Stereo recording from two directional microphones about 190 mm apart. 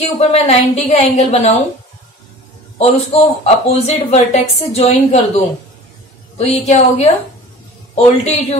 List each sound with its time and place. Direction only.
0.3 s speech: 35° left (ahead or behind)
2.8 s speech: 35° left (ahead or behind)